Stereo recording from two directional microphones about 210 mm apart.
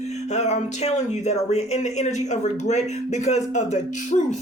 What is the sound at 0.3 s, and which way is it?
Speech, 30° left (ahead or behind).